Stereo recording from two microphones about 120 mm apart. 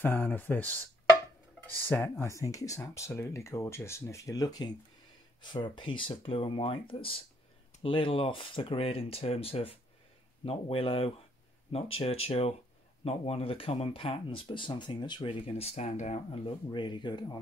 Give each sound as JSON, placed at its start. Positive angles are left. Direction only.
{"t": 0.0, "sound": "speech", "side_deg": 15}
{"t": 16.7, "sound": "speech", "side_deg": 40}